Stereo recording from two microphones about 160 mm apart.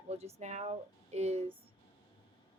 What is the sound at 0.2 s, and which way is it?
Speech, 40° right (ahead or behind).